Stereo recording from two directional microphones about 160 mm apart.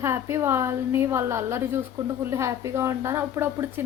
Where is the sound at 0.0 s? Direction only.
15° right (ahead or behind).